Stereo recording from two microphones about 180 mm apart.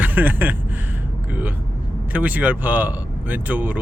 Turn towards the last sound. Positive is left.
turn(degrees=-10)  # may be behind; listen again after turning